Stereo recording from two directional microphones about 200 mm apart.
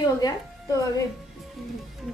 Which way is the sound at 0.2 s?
15° left (ahead or behind).